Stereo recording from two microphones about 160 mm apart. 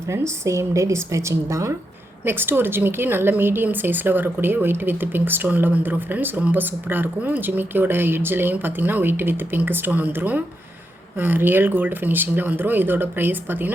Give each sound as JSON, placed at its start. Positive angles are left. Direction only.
{"t": 0.1, "sound": "a woman's voice", "side_deg": -20}